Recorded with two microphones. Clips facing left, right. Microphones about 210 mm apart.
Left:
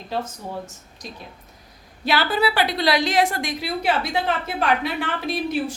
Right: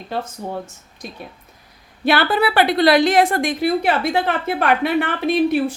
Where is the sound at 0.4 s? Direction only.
55° right (ahead or behind).